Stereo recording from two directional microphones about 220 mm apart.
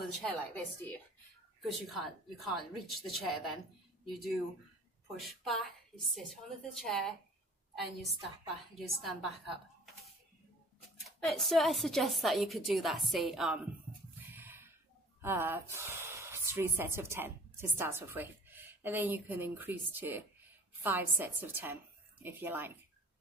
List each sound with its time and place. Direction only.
0.0 s a woman's voice: 5° left (ahead or behind)
11.1 s a woman's voice: centre (ahead or behind)
14.3 s a sound: 10° right (ahead or behind)
15.2 s speech: 10° right (ahead or behind)